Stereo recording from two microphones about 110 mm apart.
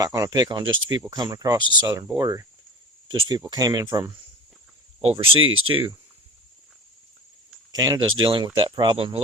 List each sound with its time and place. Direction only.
0.0 s speech: 35° right (ahead or behind)
5.0 s speech: 60° right (ahead or behind)
5.7 s speech: 35° right (ahead or behind)
7.7 s speech: 40° right (ahead or behind)